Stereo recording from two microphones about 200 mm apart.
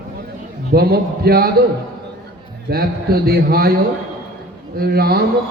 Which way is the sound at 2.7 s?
50° right (ahead or behind).